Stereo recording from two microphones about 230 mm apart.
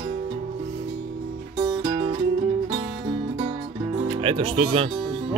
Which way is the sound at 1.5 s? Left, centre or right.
Right.